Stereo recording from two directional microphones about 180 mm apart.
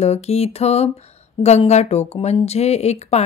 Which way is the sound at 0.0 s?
35° left (ahead or behind).